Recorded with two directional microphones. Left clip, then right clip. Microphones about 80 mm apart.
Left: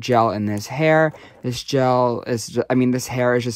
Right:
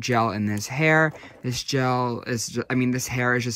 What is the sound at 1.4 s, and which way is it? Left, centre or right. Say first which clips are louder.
Speech: left 6 dB; left.